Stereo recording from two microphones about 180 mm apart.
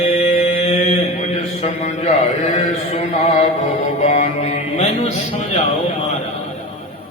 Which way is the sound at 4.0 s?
40° left (ahead or behind).